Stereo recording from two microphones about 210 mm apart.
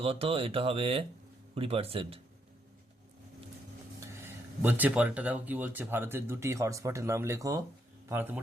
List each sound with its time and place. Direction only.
0.0 s speech: 25° right (ahead or behind)
4.6 s speech: 10° right (ahead or behind)